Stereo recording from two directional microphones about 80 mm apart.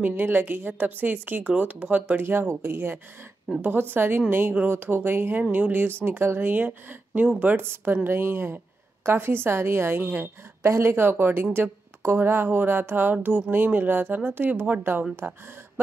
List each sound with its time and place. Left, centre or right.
0.0 s speech: right
3.5 s a woman's voice: centre
3.9 s speech: right